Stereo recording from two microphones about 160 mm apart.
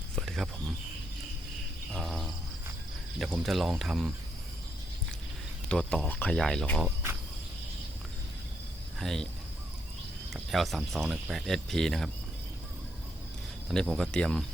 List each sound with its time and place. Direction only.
0.2 s a sound: centre (ahead or behind)
1.9 s cricket: centre (ahead or behind)
3.2 s speech: centre (ahead or behind)
5.6 s speech: 5° left (ahead or behind)
6.8 s cricket: 15° right (ahead or behind)
9.0 s speech: 5° left (ahead or behind)
10.3 s speech: centre (ahead or behind)
13.7 s speech: 5° right (ahead or behind)